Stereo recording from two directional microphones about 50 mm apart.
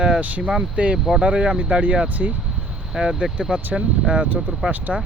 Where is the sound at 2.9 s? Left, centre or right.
Centre.